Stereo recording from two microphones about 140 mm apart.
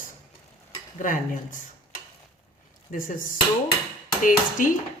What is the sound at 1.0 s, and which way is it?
Speech, 70° left (ahead or behind).